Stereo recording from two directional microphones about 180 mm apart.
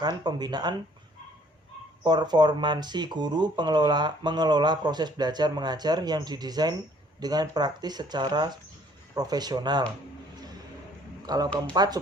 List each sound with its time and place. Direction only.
0.0 s speech: 20° right (ahead or behind)
2.0 s speech: 25° right (ahead or behind)
11.3 s speech: 20° right (ahead or behind)